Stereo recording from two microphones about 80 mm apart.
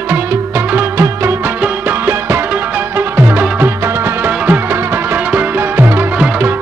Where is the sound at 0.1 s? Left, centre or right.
Right.